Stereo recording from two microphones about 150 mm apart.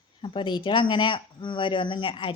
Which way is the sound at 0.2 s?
30° left (ahead or behind).